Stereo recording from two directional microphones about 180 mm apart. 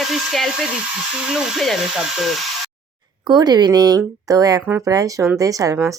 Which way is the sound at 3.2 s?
25° right (ahead or behind).